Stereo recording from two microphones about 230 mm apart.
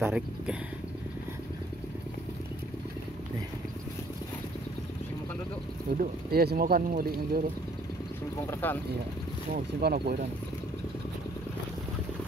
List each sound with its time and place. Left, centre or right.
0.0 s speech: centre
5.9 s speech: right
8.5 s speech: centre
9.8 s speech: right